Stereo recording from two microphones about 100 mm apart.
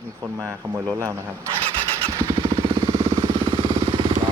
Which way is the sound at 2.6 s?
60° right (ahead or behind).